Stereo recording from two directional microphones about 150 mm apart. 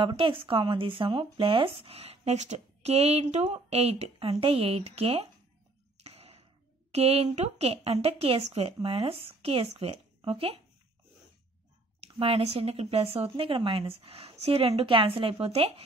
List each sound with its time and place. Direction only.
0.0 s speech: 35° right (ahead or behind)
5.9 s a sound: 45° right (ahead or behind)
6.9 s speech: 45° right (ahead or behind)
12.0 s speech: 40° right (ahead or behind)